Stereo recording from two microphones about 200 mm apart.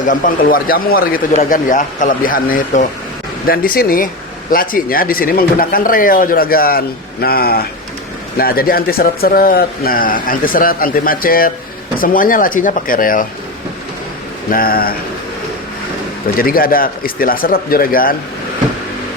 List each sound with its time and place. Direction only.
0.0 s speech: 45° left (ahead or behind)
14.5 s speech: 45° left (ahead or behind)
16.4 s speech: 45° left (ahead or behind)